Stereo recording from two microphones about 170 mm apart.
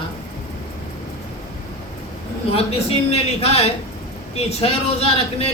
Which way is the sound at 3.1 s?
35° left (ahead or behind).